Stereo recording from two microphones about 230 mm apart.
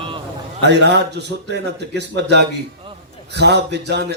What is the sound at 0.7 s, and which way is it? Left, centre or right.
Speech, right.